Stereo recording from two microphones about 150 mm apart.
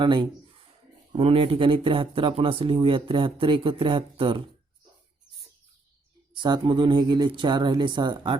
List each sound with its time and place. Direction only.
0.0 s speech: 30° right (ahead or behind)
6.3 s speech: 30° right (ahead or behind)